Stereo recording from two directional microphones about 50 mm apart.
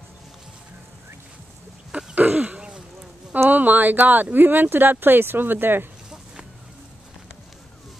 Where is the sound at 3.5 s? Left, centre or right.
Right.